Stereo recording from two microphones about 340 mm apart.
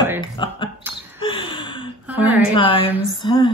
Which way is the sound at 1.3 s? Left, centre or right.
Centre.